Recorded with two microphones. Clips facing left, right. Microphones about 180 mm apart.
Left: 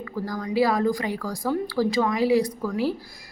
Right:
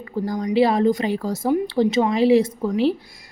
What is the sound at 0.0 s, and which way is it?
A woman's voice, 20° right (ahead or behind).